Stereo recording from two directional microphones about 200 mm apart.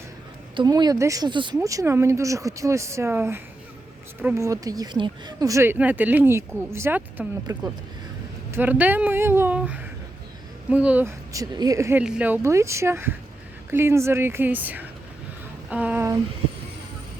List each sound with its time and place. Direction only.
0.5 s speech: 20° right (ahead or behind)